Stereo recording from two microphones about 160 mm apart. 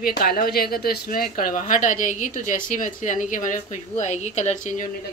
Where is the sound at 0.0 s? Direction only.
65° left (ahead or behind); by 4.8 s 45° left (ahead or behind).